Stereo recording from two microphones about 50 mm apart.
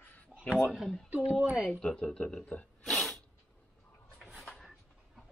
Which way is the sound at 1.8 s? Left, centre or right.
Centre.